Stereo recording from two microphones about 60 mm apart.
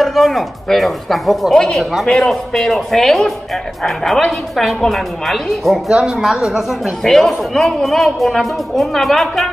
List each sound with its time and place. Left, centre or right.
0.0 s a man's voice: centre
7.0 s a man's voice: centre